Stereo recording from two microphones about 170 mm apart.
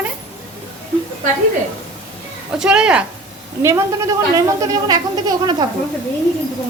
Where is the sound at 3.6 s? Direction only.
15° right (ahead or behind).